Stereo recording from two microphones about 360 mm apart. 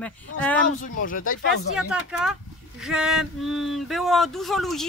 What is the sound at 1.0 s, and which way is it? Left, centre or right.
Speech, left.